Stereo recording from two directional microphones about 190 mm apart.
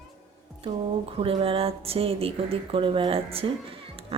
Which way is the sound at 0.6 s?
30° right (ahead or behind).